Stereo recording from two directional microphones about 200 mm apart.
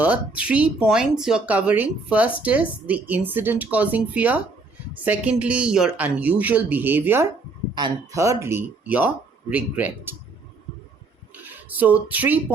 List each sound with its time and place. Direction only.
0.0 s speech: 5° right (ahead or behind)
11.4 s speech: 10° right (ahead or behind)